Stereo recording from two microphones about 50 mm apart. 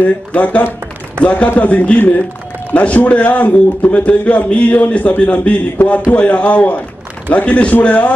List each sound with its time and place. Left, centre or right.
0.3 s a man's voice: left